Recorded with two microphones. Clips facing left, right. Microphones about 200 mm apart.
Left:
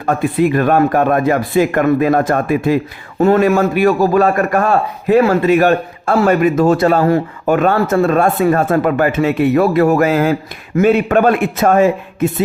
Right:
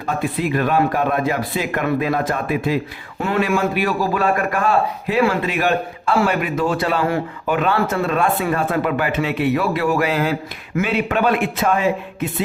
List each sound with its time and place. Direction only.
0.0 s a man's voice: 50° left (ahead or behind)